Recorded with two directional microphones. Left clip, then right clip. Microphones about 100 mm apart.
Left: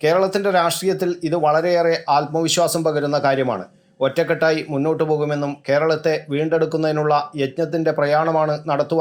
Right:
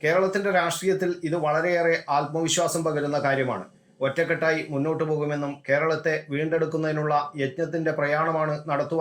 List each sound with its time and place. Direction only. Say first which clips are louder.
0.0 s speech: left 5 dB; 30° left (ahead or behind)